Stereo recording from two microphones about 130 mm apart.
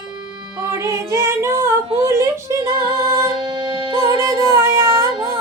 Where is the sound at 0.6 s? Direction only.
25° right (ahead or behind).